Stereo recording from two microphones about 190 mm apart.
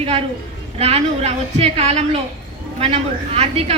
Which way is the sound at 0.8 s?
30° right (ahead or behind).